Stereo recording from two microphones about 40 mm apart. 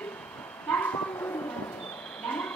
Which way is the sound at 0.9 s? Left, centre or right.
Left.